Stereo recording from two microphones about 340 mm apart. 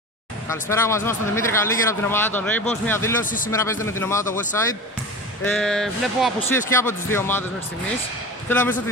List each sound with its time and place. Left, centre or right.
0.5 s speech: centre
3.3 s speech: left
3.5 s speech: centre
5.4 s speech: centre
8.5 s speech: centre